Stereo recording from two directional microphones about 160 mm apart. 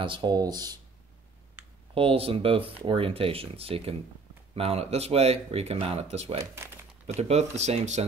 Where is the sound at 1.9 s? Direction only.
35° right (ahead or behind).